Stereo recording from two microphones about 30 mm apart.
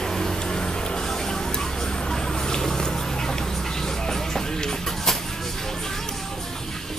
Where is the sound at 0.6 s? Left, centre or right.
Left.